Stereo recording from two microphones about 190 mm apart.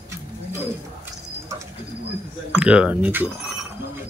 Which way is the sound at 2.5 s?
5° right (ahead or behind).